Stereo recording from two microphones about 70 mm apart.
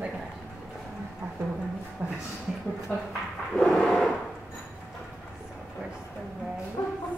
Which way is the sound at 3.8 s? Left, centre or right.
Centre.